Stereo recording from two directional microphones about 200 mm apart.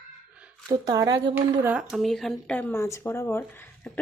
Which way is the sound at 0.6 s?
20° right (ahead or behind).